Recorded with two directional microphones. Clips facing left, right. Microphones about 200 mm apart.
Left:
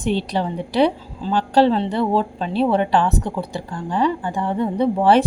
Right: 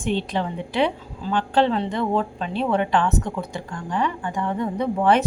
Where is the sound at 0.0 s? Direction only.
35° left (ahead or behind).